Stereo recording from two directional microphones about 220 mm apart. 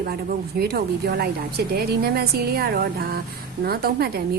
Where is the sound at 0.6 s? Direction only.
45° right (ahead or behind).